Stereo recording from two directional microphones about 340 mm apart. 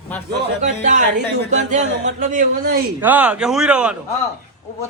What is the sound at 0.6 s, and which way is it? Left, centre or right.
Speech, right.